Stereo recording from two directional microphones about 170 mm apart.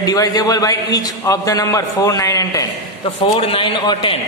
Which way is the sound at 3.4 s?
30° left (ahead or behind).